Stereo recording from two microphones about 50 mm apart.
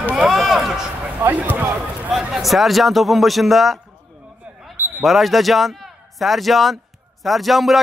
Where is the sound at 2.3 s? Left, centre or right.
Centre.